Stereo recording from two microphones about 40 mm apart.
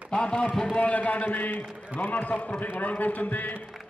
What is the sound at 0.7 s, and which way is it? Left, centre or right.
A man's voice, left.